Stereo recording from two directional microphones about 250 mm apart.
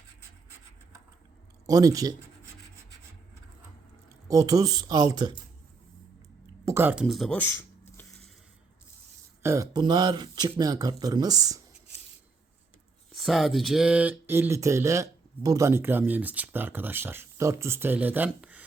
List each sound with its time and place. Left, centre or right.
1.6 s speech: centre
4.3 s speech: centre
6.7 s speech: centre
9.4 s speech: centre
13.1 s speech: centre